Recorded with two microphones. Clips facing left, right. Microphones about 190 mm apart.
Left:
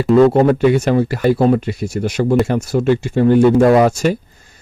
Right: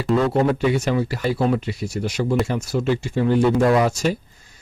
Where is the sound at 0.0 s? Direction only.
55° left (ahead or behind).